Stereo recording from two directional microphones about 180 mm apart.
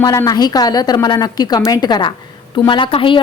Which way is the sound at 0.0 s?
20° left (ahead or behind).